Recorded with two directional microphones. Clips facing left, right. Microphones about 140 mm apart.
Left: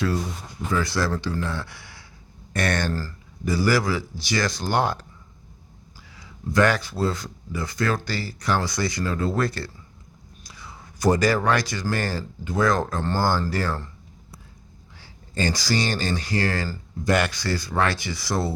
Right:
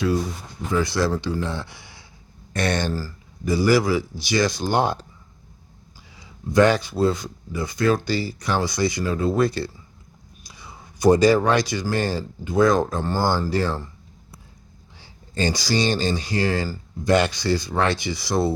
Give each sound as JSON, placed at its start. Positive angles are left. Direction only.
{"t": 0.8, "sound": "speech", "side_deg": -20}
{"t": 14.9, "sound": "speech", "side_deg": -20}